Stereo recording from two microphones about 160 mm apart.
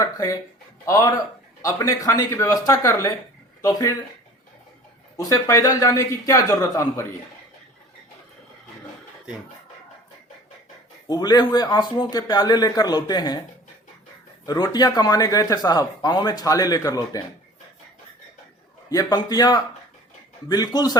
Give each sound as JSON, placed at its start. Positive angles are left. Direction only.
{"t": 0.0, "sound": "speech", "side_deg": 20}
{"t": 5.1, "sound": "speech", "side_deg": 20}
{"t": 11.1, "sound": "speech", "side_deg": 25}
{"t": 14.4, "sound": "speech", "side_deg": 25}
{"t": 19.1, "sound": "speech", "side_deg": 25}